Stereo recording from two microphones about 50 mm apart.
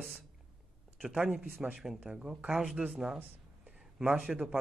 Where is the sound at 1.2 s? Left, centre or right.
Centre.